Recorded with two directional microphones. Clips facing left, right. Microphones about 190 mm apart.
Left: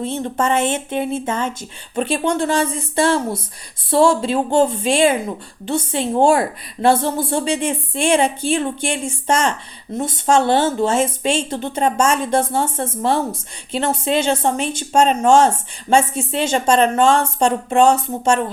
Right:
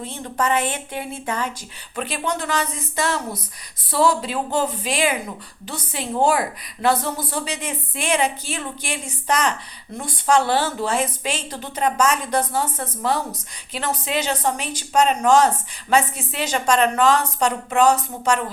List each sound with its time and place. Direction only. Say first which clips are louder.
0.0 s a woman's voice: left 5 dB; 25° left (ahead or behind)